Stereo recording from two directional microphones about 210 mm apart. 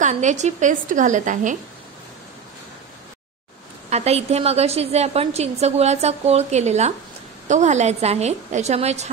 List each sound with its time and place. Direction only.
0.0 s a woman's voice: 35° right (ahead or behind)
3.9 s a woman's voice: 30° right (ahead or behind)